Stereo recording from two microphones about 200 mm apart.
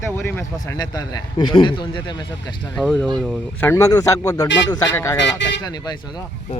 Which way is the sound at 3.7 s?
15° left (ahead or behind).